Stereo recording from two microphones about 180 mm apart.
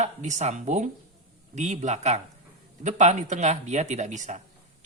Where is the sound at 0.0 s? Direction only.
40° right (ahead or behind).